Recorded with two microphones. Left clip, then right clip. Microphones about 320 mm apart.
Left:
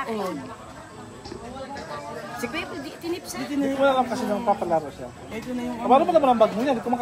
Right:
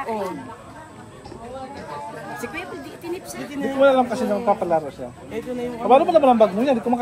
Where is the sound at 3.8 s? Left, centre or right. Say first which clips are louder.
Right 6 dB; right.